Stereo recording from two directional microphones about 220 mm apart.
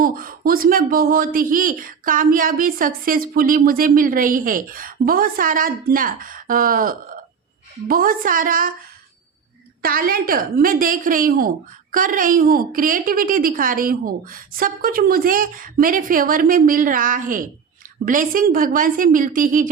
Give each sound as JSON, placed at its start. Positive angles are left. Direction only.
{"t": 0.0, "sound": "a woman's voice", "side_deg": -40}
{"t": 9.8, "sound": "a woman's voice", "side_deg": -40}